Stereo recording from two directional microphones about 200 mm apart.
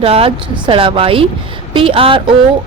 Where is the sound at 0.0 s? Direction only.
30° right (ahead or behind).